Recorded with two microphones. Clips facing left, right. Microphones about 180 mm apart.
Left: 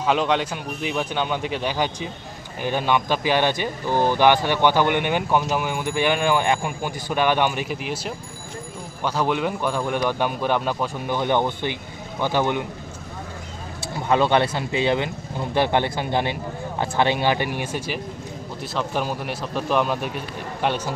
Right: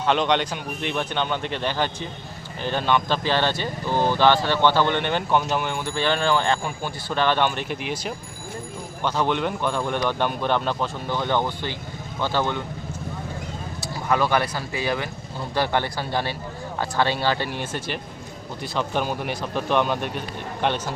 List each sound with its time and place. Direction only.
0.0 s speech: 5° left (ahead or behind)
13.9 s a man's voice: 25° left (ahead or behind); by 20.9 s 10° left (ahead or behind)